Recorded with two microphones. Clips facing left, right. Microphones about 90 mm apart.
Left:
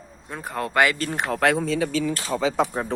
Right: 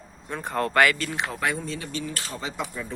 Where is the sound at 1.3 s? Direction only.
70° left (ahead or behind).